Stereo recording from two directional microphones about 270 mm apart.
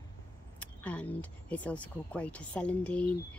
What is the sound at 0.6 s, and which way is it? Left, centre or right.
Speech, centre.